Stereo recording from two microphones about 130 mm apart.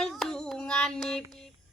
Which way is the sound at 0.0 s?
5° left (ahead or behind).